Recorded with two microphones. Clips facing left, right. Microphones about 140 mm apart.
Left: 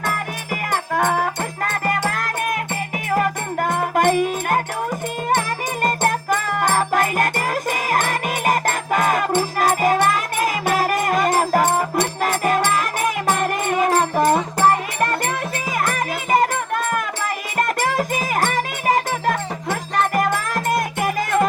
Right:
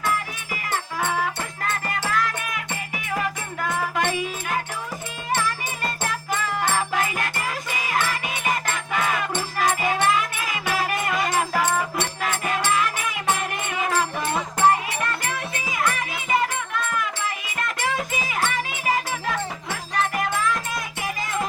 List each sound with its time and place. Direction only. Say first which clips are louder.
0.7 s music: left 6 dB; 45° left (ahead or behind)